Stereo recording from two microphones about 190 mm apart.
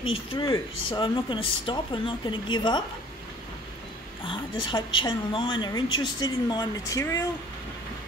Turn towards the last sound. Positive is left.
turn(degrees=15)  # may be behind; listen again after turning